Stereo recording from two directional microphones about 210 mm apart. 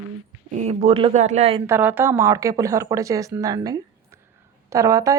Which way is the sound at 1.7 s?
10° right (ahead or behind).